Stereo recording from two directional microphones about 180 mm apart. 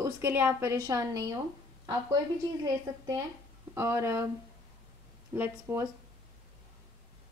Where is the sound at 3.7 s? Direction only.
15° right (ahead or behind).